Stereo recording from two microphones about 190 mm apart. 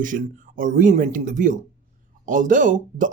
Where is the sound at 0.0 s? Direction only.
45° right (ahead or behind).